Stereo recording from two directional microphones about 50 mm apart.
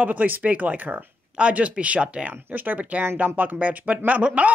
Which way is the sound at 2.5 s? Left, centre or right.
Right.